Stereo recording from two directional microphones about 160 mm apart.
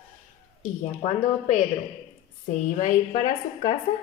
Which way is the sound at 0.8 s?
45° left (ahead or behind).